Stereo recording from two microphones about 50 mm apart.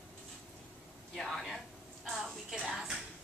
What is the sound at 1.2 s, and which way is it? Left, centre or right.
A woman's voice, centre.